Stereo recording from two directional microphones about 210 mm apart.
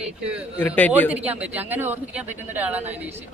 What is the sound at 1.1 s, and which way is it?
A man's voice, 5° right (ahead or behind).